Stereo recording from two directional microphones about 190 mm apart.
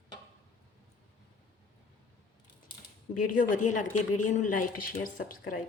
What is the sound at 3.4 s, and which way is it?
Speech, 40° left (ahead or behind).